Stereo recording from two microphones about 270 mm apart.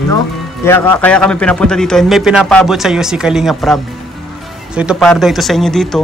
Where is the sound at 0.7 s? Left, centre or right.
Centre.